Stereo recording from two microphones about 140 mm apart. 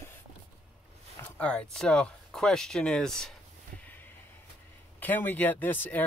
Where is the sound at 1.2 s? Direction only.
10° left (ahead or behind).